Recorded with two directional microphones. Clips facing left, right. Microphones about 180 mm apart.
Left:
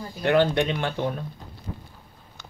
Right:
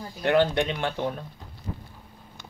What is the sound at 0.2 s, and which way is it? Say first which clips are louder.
Speech: left 1 dB; 30° right (ahead or behind).